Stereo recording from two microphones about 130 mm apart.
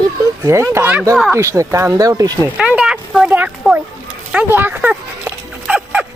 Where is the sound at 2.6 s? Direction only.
5° right (ahead or behind).